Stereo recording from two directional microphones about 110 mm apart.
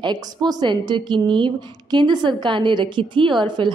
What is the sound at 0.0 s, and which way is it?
A woman's voice, 40° right (ahead or behind).